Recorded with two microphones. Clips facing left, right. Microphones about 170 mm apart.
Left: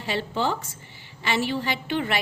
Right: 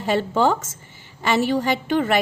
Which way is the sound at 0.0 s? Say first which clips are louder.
Right 7 dB; 45° right (ahead or behind).